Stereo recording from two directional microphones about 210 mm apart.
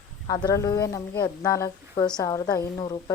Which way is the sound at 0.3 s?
20° left (ahead or behind).